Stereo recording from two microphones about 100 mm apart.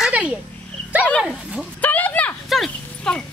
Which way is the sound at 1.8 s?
15° left (ahead or behind).